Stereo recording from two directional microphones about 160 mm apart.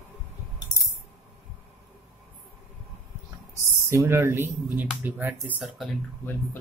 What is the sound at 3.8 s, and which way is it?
Speech, 15° right (ahead or behind).